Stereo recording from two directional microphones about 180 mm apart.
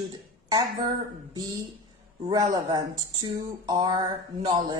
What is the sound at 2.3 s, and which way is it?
Speech, 20° right (ahead or behind).